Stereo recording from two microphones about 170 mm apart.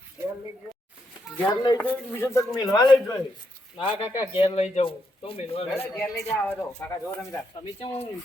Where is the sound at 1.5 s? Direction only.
25° left (ahead or behind).